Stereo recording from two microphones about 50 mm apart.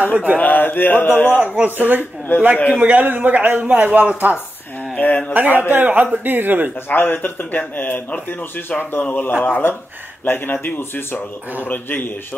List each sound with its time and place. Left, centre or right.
0.0 s a man's voice: right
0.4 s speech: left
1.6 s a man's voice: right
2.0 s speech: left
2.8 s a man's voice: right
4.9 s mantra: left
5.3 s a man's voice: right
6.9 s speech: left